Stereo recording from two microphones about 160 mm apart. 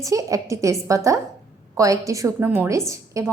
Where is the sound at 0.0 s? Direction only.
20° right (ahead or behind).